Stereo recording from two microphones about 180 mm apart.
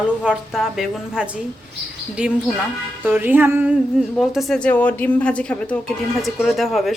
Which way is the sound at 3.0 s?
10° right (ahead or behind).